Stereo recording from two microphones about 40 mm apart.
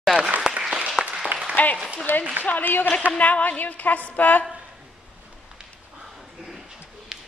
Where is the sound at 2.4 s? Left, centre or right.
Left.